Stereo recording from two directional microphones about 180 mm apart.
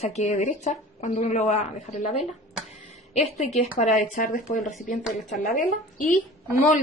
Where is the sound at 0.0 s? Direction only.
40° left (ahead or behind).